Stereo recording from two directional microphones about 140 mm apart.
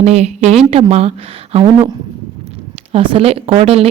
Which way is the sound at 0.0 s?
50° right (ahead or behind).